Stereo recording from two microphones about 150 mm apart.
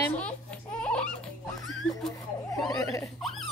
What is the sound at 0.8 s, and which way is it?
Music, 5° left (ahead or behind).